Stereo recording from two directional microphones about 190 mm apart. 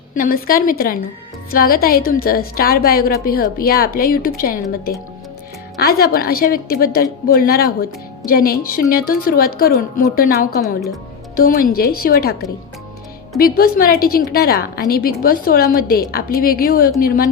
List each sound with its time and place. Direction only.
0.1 s a woman's voice: 50° left (ahead or behind)
13.4 s a woman's voice: 50° left (ahead or behind)